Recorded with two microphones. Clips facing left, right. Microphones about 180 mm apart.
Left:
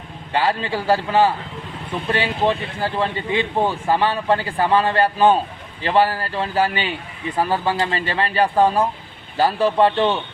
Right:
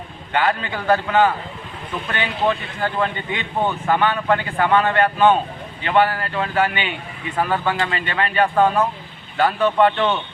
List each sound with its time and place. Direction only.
0.3 s speech: 30° left (ahead or behind)